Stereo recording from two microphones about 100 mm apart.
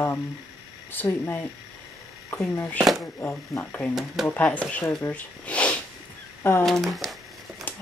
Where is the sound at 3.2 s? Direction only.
25° left (ahead or behind).